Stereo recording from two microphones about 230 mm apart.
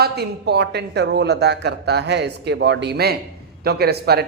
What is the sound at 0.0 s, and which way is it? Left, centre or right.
A man's voice, right.